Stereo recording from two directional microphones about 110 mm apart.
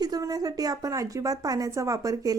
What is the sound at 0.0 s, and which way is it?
A woman's voice, 35° right (ahead or behind).